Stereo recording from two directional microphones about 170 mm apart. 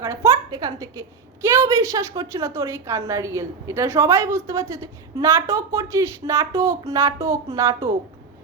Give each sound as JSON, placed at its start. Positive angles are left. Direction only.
{"t": 0.0, "sound": "a woman's voice", "side_deg": -15}